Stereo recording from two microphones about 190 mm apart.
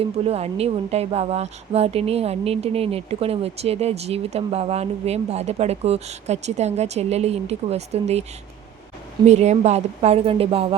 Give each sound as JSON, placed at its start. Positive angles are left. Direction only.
{"t": 0.0, "sound": "a woman's voice", "side_deg": -30}
{"t": 9.2, "sound": "a woman's voice", "side_deg": -35}